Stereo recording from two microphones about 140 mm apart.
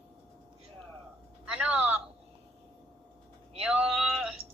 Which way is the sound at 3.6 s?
5° right (ahead or behind).